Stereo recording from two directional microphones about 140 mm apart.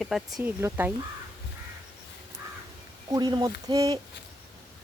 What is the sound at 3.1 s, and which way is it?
Speech, 30° right (ahead or behind).